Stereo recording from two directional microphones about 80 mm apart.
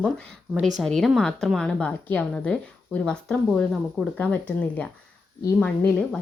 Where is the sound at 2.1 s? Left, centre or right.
Left.